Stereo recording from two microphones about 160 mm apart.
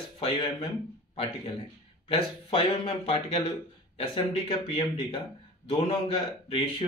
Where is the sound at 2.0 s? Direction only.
35° left (ahead or behind).